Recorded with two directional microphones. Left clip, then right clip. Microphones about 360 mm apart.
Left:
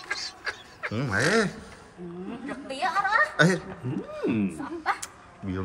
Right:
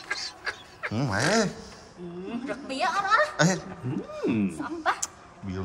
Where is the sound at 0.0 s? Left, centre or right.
Centre.